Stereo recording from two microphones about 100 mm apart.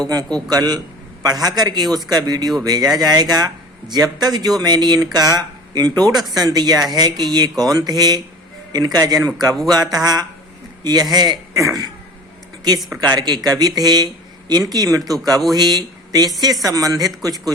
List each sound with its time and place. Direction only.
0.1 s speech: 40° right (ahead or behind)
13.0 s speech: 40° right (ahead or behind)